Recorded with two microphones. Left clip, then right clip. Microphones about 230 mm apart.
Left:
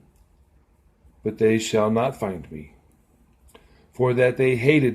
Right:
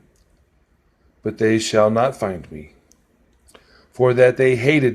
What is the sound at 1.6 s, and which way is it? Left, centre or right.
Speech, right.